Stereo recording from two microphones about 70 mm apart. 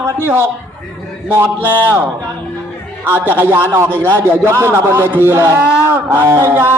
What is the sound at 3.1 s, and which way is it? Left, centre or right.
A man's voice, right.